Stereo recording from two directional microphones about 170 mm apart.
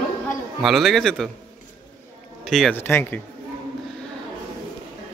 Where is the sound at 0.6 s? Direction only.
Centre (ahead or behind).